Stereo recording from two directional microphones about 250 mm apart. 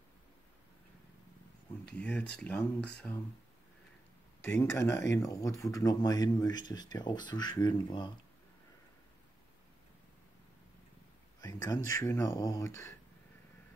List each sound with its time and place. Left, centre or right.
2.0 s speech: centre
4.4 s speech: centre
11.4 s a sound: centre
12.0 s speech: centre